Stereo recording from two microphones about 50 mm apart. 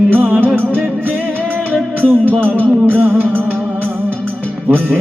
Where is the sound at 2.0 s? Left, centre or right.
Right.